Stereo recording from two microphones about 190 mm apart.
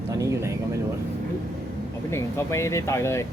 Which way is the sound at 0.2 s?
15° right (ahead or behind).